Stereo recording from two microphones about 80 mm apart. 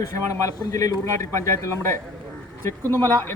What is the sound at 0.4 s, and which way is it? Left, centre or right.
Speech, left.